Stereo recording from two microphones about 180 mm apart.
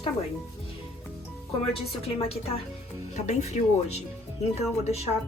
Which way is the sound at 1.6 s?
35° left (ahead or behind).